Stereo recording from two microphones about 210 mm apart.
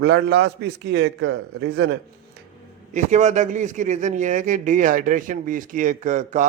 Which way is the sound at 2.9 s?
35° right (ahead or behind).